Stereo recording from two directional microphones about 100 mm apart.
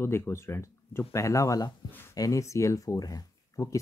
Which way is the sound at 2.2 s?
30° left (ahead or behind).